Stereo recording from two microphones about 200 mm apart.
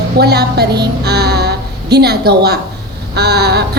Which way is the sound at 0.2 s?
55° right (ahead or behind).